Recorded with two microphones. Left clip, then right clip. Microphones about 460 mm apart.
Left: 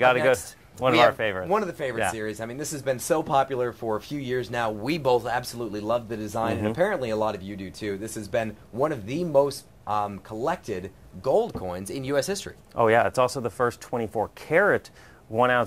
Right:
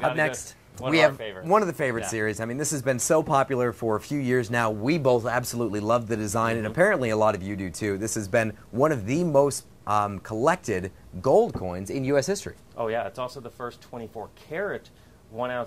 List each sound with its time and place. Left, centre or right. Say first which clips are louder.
1.5 s speech: right 3 dB; right
11.6 s speech: right 2 dB; centre
12.7 s speech: left 9 dB; left